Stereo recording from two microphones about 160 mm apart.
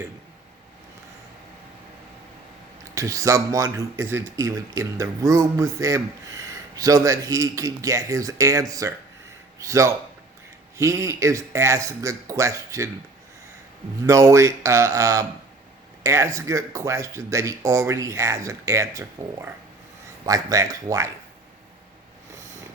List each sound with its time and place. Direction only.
2.9 s speech: 20° right (ahead or behind)
14.0 s speech: 20° right (ahead or behind)